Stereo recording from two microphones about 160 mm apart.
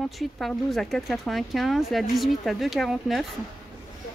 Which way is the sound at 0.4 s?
Centre (ahead or behind).